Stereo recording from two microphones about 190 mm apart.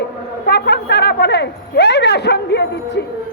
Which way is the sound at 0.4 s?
60° left (ahead or behind).